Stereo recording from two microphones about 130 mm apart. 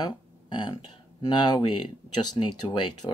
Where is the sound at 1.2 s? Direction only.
35° left (ahead or behind).